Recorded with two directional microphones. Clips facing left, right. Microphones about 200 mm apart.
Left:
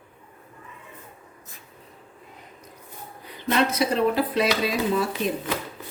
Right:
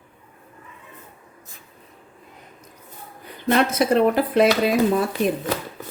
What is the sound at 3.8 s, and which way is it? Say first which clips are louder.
Speech: right 4 dB; 55° right (ahead or behind).